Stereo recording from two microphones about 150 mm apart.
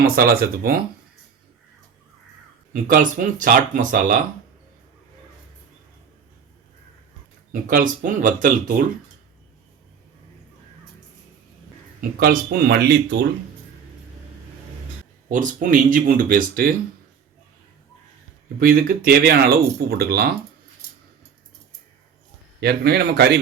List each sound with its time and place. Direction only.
0.0 s speech: 85° right
2.8 s speech: 65° right (ahead or behind)
7.5 s speech: 65° right (ahead or behind)
11.9 s speech: 85° right
15.3 s speech: 60° right (ahead or behind)
18.6 s speech: 75° right (ahead or behind); by 20.2 s 90° right
22.6 s speech: 90° right